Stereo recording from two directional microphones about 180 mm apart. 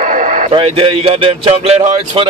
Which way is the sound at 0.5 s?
30° right (ahead or behind).